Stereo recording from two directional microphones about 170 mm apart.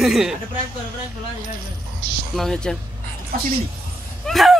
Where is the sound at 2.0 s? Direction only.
55° right (ahead or behind).